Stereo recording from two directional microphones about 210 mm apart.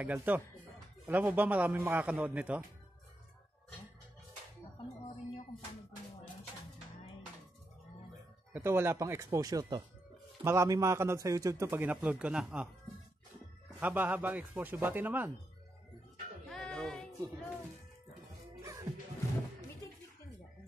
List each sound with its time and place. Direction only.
0.0 s a man's voice: 10° right (ahead or behind)
8.5 s a man's voice: 10° right (ahead or behind)
13.7 s a man's voice: 5° right (ahead or behind)
16.4 s music: centre (ahead or behind)
18.7 s music: 15° right (ahead or behind)